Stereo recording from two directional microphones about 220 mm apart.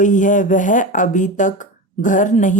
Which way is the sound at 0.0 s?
35° left (ahead or behind).